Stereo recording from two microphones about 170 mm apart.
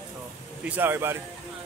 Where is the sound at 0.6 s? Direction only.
10° right (ahead or behind).